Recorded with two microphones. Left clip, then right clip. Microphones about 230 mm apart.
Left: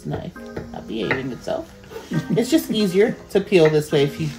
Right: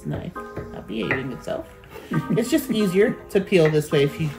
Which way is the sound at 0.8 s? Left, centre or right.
Centre.